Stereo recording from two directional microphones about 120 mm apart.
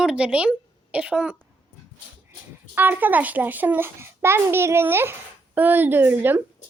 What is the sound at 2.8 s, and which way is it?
A child's voice, 15° right (ahead or behind).